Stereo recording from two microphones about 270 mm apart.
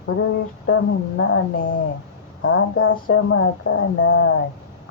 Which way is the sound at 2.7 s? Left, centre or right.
Left.